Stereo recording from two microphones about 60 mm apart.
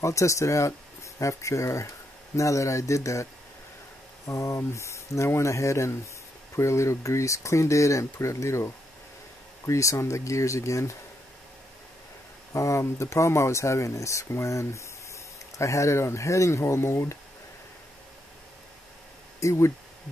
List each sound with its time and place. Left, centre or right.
0.0 s speech: left
4.3 s speech: left
12.5 s speech: left
19.4 s speech: left